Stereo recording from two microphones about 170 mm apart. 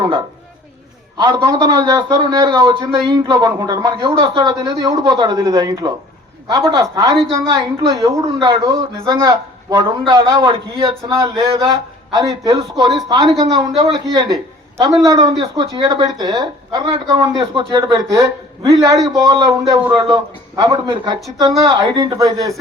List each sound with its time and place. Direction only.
1.1 s a woman's voice: 25° right (ahead or behind)